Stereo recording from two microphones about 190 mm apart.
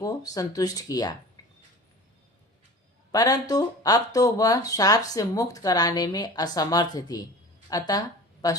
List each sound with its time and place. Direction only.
0.0 s speech: 20° left (ahead or behind)
1.4 s a sound: 20° left (ahead or behind)
3.1 s speech: 20° left (ahead or behind)